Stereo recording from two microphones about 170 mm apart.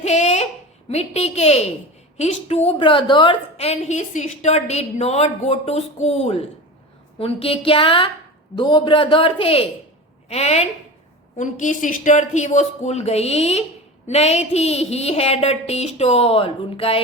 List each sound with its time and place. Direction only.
0.0 s a sound: 40° left (ahead or behind)
0.9 s a woman's voice: 40° left (ahead or behind)
2.6 s a woman's voice: 30° left (ahead or behind)
11.3 s a woman's voice: 50° left (ahead or behind); by 17.0 s 35° left (ahead or behind)